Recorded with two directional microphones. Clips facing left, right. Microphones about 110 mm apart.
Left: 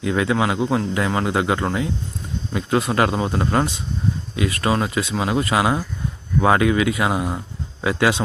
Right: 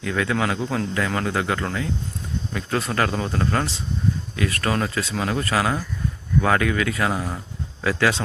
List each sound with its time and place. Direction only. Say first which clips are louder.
0.0 s a man's voice: left 3 dB; 20° left (ahead or behind)